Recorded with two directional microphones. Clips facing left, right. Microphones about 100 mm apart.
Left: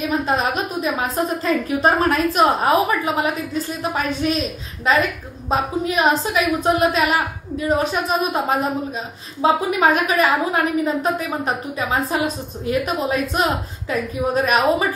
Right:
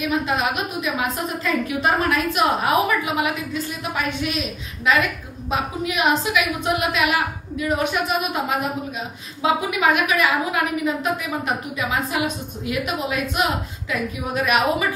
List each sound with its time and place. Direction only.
0.1 s a woman's voice: 35° left (ahead or behind)